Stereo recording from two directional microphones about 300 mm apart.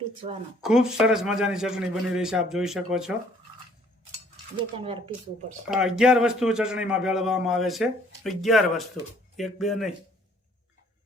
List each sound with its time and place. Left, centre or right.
0.6 s a man's voice: centre
4.8 s speech: centre
5.6 s a man's voice: centre